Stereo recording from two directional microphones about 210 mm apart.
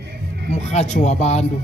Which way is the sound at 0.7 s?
30° left (ahead or behind).